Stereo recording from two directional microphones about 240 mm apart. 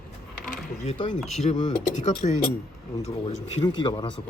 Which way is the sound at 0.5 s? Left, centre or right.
Left.